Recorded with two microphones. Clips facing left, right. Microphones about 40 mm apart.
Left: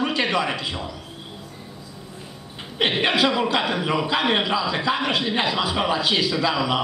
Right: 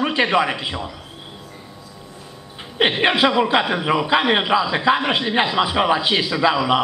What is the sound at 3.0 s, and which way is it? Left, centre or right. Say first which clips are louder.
A man's voice: right 4 dB; right.